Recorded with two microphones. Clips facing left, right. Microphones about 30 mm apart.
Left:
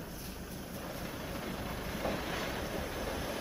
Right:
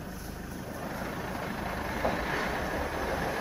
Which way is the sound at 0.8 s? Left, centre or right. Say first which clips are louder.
Right 6 dB; right.